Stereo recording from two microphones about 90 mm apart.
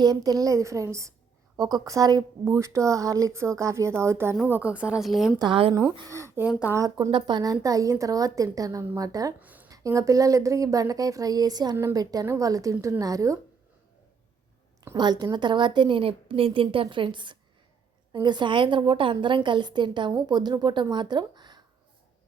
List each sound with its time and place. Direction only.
0.0 s a woman's voice: 45° right (ahead or behind)
1.5 s a woman's voice: 50° right (ahead or behind)
2.4 s a woman's voice: 35° right (ahead or behind)
4.4 s a woman's voice: 20° right (ahead or behind)
5.0 s a woman's voice: centre (ahead or behind)
6.1 s speech: 30° right (ahead or behind)
7.1 s a woman's voice: 65° right (ahead or behind)
7.5 s a woman's voice: 40° right (ahead or behind)
9.4 s a sound: 20° right (ahead or behind)
9.6 s a woman's voice: 40° right (ahead or behind)
12.2 s a woman's voice: 35° right (ahead or behind)
14.9 s a woman's voice: 50° right (ahead or behind)